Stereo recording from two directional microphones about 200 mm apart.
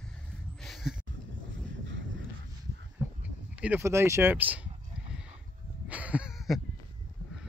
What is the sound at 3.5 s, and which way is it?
Speech, 5° right (ahead or behind).